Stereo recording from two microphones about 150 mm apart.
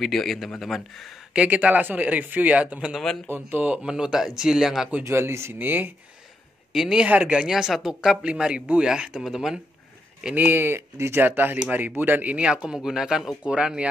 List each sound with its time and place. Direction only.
0.0 s speech: centre (ahead or behind)
3.3 s speech: 15° right (ahead or behind)
5.0 s speech: 15° right (ahead or behind)